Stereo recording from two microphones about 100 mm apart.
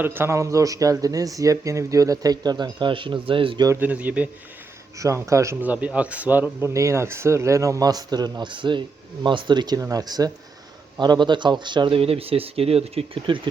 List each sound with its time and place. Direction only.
0.0 s speech: 20° right (ahead or behind); by 3.6 s 60° right (ahead or behind)
3.8 s speech: 15° right (ahead or behind)
4.9 s speech: 30° right (ahead or behind)
5.5 s speech: 15° right (ahead or behind)
6.7 s a man's voice: 30° right (ahead or behind); by 11.9 s 50° right (ahead or behind)
11.9 s speech: 75° right (ahead or behind)
13.2 s speech: 55° right (ahead or behind)